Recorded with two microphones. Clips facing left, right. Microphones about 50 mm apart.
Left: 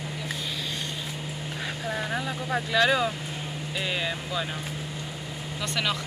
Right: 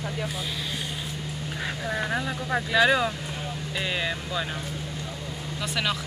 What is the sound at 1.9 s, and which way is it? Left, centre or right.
Vehicle, centre.